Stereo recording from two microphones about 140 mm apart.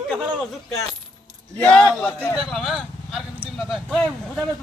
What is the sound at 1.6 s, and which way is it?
Speech, 5° left (ahead or behind).